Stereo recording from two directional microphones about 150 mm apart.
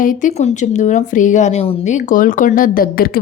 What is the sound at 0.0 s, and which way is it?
A woman's voice, 60° left (ahead or behind).